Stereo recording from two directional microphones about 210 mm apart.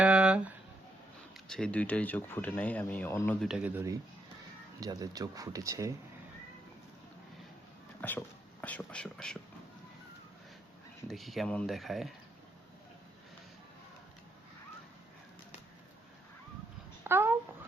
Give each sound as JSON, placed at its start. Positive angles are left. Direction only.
{"t": 0.0, "sound": "a sound", "side_deg": -5}
{"t": 1.5, "sound": "speech", "side_deg": 5}
{"t": 3.4, "sound": "speech", "side_deg": 0}
{"t": 4.8, "sound": "speech", "side_deg": -15}
{"t": 8.0, "sound": "speech", "side_deg": 5}
{"t": 11.1, "sound": "speech", "side_deg": 0}
{"t": 17.0, "sound": "babbling", "side_deg": -10}